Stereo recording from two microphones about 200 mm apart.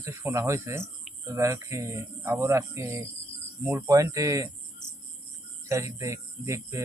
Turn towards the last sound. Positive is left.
turn(degrees=-15)  # may be behind; listen again after turning